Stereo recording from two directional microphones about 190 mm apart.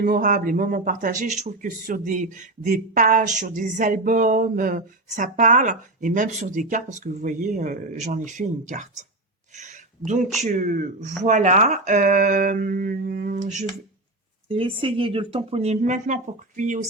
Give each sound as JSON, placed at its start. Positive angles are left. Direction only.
{"t": 0.0, "sound": "speech", "side_deg": -45}
{"t": 9.6, "sound": "a sound", "side_deg": -40}
{"t": 10.4, "sound": "speech", "side_deg": -40}
{"t": 14.4, "sound": "speech", "side_deg": -30}